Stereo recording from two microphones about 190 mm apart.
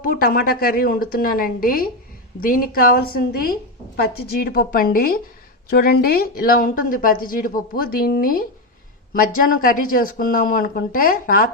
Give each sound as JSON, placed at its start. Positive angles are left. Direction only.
{"t": 0.0, "sound": "a woman's voice", "side_deg": 50}